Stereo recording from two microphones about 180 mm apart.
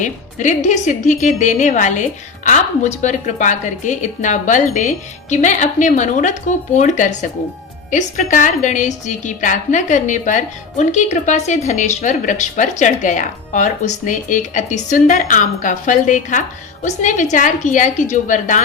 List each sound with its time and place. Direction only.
0.0 s a woman's voice: 45° left (ahead or behind)